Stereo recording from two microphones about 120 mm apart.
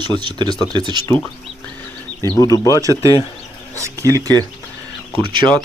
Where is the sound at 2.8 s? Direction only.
25° right (ahead or behind).